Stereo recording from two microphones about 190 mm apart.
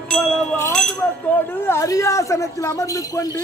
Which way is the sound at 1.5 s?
15° left (ahead or behind).